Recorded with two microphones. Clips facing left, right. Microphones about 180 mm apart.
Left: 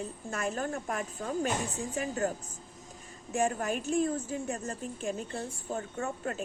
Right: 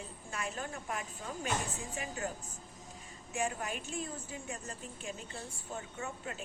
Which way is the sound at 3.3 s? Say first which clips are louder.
Left 7 dB; 45° left (ahead or behind).